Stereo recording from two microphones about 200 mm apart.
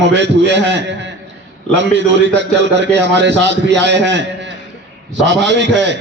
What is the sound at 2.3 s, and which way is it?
A man's voice, 60° right (ahead or behind).